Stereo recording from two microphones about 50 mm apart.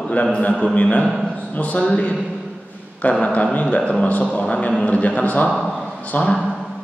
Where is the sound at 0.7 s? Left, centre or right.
Left.